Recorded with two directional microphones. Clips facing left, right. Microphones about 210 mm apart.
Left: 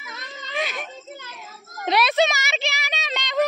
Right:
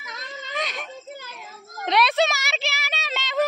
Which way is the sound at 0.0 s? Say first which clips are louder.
Right 1 dB; 5° left (ahead or behind).